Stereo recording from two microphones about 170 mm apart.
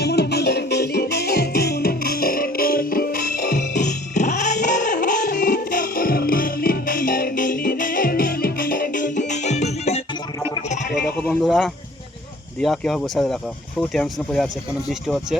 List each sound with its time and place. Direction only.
0.0 s music: 75° left (ahead or behind); by 10.0 s 40° left (ahead or behind)
11.2 s sheep: 5° left (ahead or behind)
12.5 s speech: 5° left (ahead or behind)